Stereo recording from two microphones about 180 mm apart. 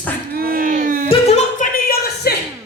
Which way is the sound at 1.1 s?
35° left (ahead or behind).